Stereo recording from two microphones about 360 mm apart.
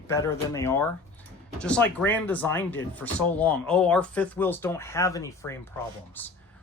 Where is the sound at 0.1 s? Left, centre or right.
Centre.